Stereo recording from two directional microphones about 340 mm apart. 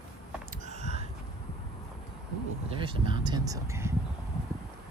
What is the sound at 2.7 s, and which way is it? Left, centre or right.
Speech, centre.